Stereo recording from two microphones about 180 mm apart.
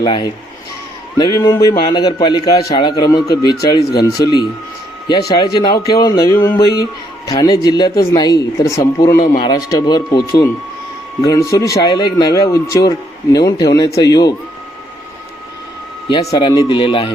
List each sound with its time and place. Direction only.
0.0 s a man's voice: 25° left (ahead or behind)
9.1 s speech: 50° left (ahead or behind)
9.4 s a man's voice: 20° left (ahead or behind)
16.0 s a man's voice: 25° left (ahead or behind)